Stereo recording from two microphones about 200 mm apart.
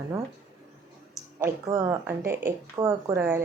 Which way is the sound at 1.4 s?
15° right (ahead or behind).